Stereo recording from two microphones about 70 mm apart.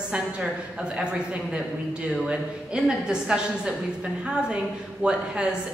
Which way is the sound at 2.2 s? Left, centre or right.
Centre.